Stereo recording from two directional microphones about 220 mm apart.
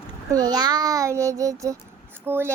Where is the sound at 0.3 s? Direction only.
15° right (ahead or behind).